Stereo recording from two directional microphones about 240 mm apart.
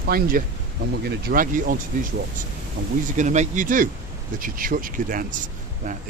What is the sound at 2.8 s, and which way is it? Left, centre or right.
Speech, right.